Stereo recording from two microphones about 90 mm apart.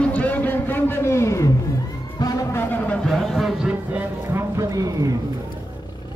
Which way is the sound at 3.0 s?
Centre (ahead or behind).